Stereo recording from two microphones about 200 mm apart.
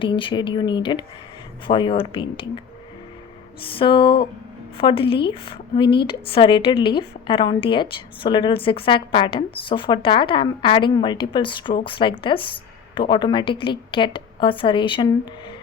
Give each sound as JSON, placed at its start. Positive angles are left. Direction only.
{"t": 0.0, "sound": "a woman's voice", "side_deg": 25}
{"t": 3.8, "sound": "a woman's voice", "side_deg": 25}